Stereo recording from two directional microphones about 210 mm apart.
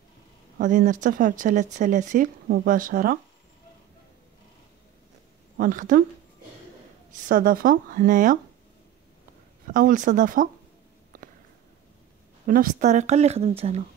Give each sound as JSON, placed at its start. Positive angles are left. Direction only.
{"t": 0.6, "sound": "speech", "side_deg": -35}
{"t": 5.6, "sound": "speech", "side_deg": -40}
{"t": 7.1, "sound": "speech", "side_deg": -40}
{"t": 9.7, "sound": "speech", "side_deg": -40}
{"t": 11.1, "sound": "a sound", "side_deg": -40}
{"t": 12.4, "sound": "speech", "side_deg": -40}